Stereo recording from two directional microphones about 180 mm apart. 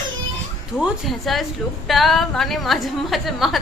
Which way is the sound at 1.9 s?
Centre (ahead or behind).